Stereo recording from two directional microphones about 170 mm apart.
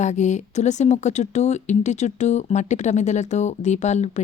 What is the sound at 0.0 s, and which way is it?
Speech, 45° left (ahead or behind).